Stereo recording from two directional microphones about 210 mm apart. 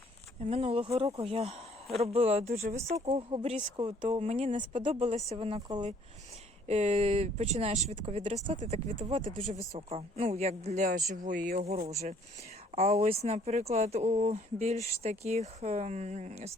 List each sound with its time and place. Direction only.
0.4 s speech: 25° right (ahead or behind)
6.7 s speech: 30° right (ahead or behind)